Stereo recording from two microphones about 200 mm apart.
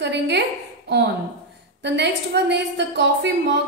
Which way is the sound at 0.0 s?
60° right (ahead or behind).